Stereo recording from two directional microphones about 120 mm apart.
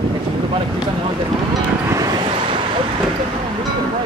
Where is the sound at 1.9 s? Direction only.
30° right (ahead or behind).